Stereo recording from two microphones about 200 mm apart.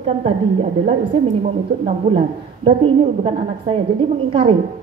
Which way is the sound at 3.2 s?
25° right (ahead or behind).